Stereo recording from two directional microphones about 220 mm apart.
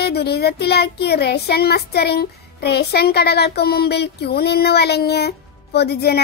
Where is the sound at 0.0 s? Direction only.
45° left (ahead or behind).